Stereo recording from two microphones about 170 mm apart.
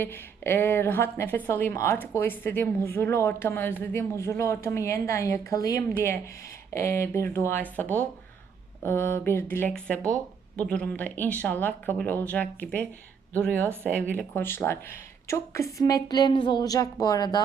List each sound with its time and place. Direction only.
0.0 s a woman's voice: 15° left (ahead or behind)
13.7 s speech: 15° right (ahead or behind)
14.2 s a woman's voice: 15° left (ahead or behind)